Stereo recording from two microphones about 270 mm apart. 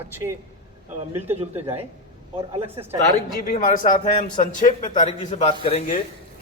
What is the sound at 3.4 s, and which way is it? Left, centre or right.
A man's voice, left.